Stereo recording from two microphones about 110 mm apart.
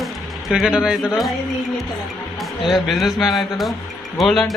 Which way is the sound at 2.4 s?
Centre (ahead or behind).